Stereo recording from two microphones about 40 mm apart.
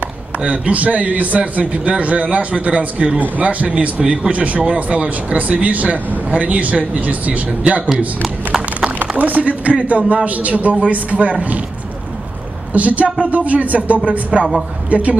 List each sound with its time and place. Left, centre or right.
0.5 s a man's voice: right
4.0 s speech: right
4.3 s a man's voice: right
9.0 s a man's voice: right
12.7 s a man's voice: right